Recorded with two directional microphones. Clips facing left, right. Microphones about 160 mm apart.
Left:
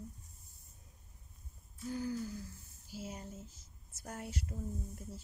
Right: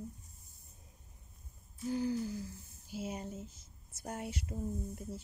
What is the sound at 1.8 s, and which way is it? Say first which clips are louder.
Speech: right 4 dB; 30° right (ahead or behind).